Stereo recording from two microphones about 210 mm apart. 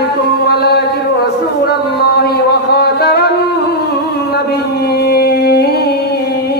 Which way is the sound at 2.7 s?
50° left (ahead or behind).